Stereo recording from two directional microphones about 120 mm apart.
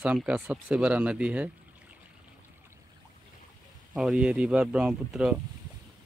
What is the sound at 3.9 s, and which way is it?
A man's voice, 5° right (ahead or behind).